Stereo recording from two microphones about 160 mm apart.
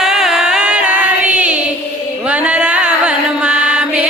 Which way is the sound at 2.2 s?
5° right (ahead or behind).